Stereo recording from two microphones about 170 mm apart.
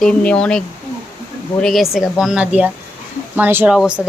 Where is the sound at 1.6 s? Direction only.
Centre (ahead or behind).